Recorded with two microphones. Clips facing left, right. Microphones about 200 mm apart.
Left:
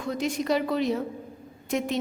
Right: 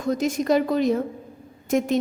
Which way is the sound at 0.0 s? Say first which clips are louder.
Right 5 dB; 45° right (ahead or behind).